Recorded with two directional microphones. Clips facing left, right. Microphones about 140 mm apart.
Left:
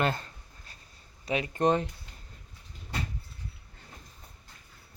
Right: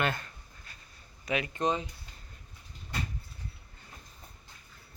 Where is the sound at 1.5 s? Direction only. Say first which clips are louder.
Left 7 dB; 60° left (ahead or behind).